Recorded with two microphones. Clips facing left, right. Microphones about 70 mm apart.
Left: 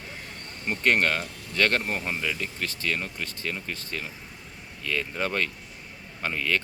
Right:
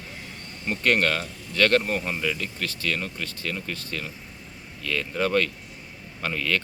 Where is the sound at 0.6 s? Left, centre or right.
Centre.